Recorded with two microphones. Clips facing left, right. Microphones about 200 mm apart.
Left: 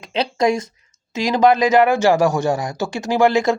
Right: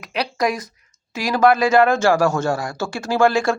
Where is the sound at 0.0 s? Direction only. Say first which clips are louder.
Left 3 dB; 25° left (ahead or behind).